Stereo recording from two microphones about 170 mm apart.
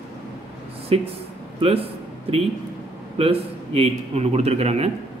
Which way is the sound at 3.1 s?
35° right (ahead or behind).